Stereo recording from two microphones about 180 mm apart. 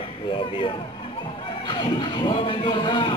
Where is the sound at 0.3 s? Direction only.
30° left (ahead or behind).